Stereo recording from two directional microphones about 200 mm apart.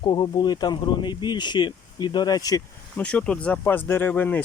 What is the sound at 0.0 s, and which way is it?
Speech, 20° left (ahead or behind).